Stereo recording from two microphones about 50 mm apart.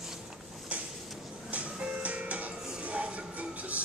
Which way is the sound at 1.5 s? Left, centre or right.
Right.